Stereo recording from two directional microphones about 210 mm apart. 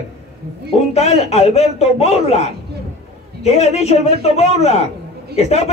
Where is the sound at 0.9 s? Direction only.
30° left (ahead or behind).